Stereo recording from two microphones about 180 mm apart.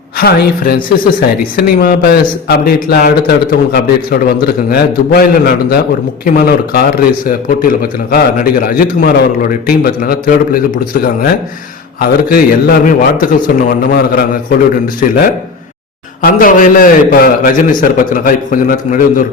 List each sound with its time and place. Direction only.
0.2 s a man's voice: 60° left (ahead or behind)
16.2 s a man's voice: 50° left (ahead or behind)